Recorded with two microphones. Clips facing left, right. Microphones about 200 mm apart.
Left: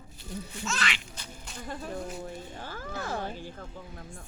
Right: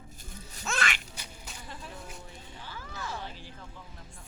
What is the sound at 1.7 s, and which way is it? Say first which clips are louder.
Speech: left 10 dB; 50° left (ahead or behind).